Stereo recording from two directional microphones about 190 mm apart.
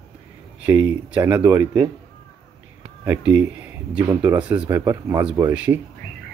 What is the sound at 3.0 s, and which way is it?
A man's voice, 10° right (ahead or behind).